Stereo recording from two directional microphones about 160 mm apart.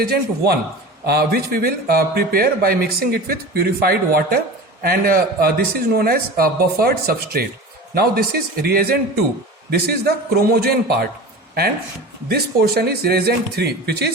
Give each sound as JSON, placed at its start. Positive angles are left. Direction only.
{"t": 0.0, "sound": "a man's voice", "side_deg": -80}
{"t": 12.3, "sound": "speech", "side_deg": -75}